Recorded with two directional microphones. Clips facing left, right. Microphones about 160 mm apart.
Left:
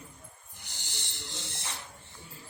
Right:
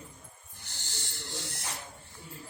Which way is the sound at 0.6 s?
15° left (ahead or behind).